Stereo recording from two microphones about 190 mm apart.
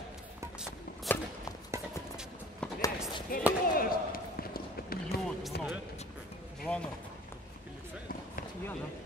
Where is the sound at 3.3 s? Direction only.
50° left (ahead or behind).